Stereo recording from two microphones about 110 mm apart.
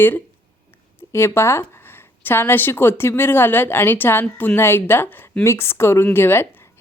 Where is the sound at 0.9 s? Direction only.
25° left (ahead or behind).